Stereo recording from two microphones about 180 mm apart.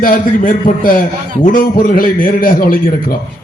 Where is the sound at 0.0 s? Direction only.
50° left (ahead or behind).